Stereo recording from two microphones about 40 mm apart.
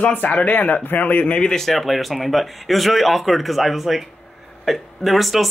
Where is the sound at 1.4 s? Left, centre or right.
Centre.